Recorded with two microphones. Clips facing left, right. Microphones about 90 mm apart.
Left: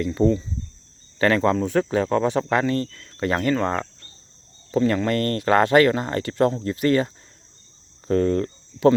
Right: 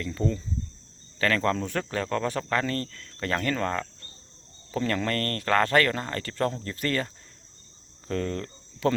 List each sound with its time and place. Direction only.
0.0 s speech: 25° left (ahead or behind)